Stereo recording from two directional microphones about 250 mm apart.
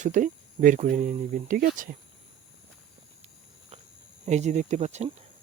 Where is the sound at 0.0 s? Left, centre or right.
Right.